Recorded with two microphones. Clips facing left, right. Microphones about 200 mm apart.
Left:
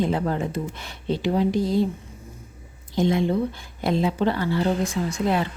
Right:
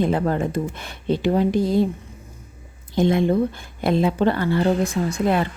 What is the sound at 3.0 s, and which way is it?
A woman's voice, 55° right (ahead or behind).